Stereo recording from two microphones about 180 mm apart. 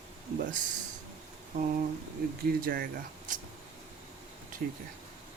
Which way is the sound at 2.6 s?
55° right (ahead or behind).